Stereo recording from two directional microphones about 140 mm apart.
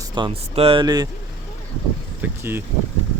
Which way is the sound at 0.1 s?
35° right (ahead or behind).